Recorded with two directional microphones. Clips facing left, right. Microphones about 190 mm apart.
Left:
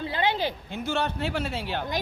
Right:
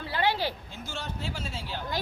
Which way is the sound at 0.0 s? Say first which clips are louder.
Left 2 dB; 20° left (ahead or behind).